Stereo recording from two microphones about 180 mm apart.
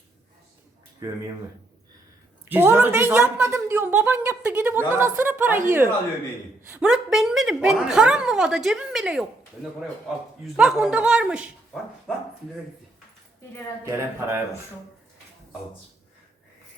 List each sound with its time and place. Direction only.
1.0 s a woman's voice: 15° right (ahead or behind)
2.5 s a woman's voice: 10° right (ahead or behind)
6.7 s a woman's voice: 5° right (ahead or behind)
10.4 s a woman's voice: centre (ahead or behind)
13.9 s a woman's voice: 15° right (ahead or behind)